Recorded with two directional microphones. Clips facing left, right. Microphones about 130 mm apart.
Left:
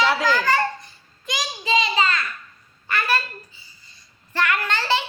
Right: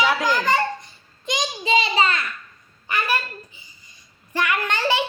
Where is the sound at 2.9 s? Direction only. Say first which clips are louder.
Even; 15° right (ahead or behind).